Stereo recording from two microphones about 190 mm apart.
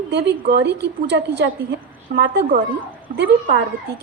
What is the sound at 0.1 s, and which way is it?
A woman's voice, 65° right (ahead or behind).